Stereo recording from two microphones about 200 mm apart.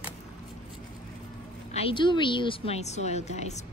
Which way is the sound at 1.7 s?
25° left (ahead or behind).